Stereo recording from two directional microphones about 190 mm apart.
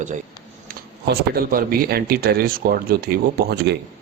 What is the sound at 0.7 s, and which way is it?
Speech, 55° right (ahead or behind).